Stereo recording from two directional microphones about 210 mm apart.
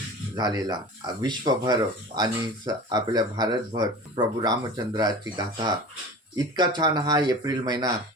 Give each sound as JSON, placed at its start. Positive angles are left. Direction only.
{"t": 0.3, "sound": "speech", "side_deg": -20}